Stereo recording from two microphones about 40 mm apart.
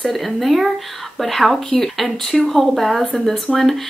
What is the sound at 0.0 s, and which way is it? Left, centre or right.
Speech, centre.